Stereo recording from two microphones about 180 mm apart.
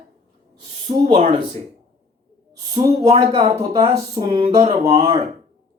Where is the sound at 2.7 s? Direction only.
20° right (ahead or behind).